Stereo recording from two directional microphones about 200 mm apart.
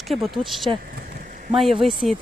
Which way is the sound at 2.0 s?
Centre (ahead or behind).